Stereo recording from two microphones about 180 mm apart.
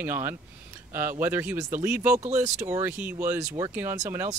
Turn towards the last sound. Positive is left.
turn(degrees=-10)  # may be behind; listen again after turning